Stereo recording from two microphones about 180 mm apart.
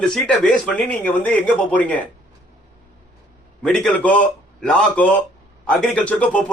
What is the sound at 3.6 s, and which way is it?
A man's voice, 5° left (ahead or behind).